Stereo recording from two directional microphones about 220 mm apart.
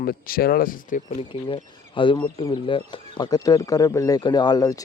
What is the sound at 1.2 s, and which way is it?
Speech, 25° left (ahead or behind).